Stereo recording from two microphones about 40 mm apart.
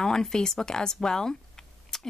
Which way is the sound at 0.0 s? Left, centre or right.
Centre.